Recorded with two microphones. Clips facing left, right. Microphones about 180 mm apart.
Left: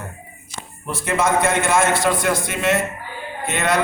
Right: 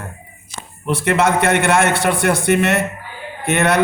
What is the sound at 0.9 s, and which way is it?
A man's voice, 70° right (ahead or behind).